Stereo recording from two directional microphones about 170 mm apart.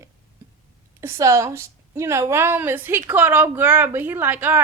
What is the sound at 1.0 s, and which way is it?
A woman's voice, 15° right (ahead or behind).